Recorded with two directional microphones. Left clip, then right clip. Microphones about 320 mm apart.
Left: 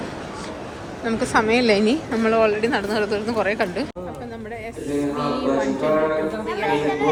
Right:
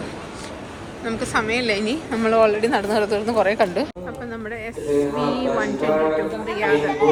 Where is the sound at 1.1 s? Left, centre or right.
Centre.